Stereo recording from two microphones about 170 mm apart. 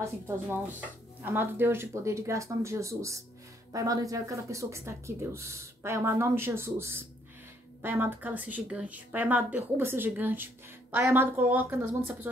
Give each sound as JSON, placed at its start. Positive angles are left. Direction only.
{"t": 0.0, "sound": "speech", "side_deg": -10}